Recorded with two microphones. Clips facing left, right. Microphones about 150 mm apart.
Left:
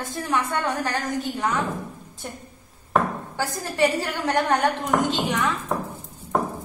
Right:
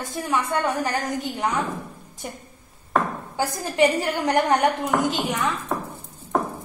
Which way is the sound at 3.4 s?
15° right (ahead or behind).